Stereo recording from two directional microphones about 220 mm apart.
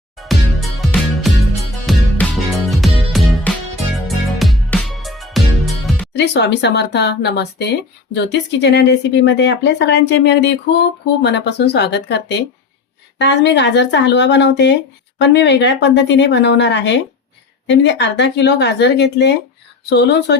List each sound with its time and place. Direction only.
0.2 s music: centre (ahead or behind)
6.1 s speech: 50° left (ahead or behind)